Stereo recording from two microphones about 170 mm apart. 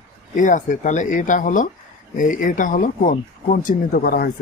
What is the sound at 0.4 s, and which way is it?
Speech, 50° left (ahead or behind).